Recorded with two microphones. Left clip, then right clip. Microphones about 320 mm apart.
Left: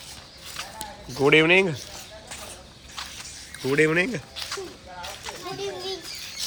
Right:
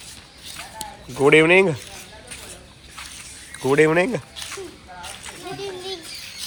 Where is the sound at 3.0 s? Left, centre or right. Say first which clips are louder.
Left 1 dB; centre.